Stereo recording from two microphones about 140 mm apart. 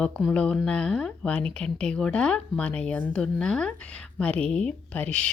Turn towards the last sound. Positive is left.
turn(degrees=10)  # may be behind; listen again after turning